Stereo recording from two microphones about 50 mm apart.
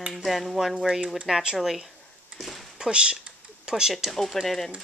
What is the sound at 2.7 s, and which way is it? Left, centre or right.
Speech, centre.